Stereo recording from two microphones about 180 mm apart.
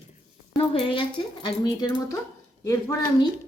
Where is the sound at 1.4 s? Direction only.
25° left (ahead or behind).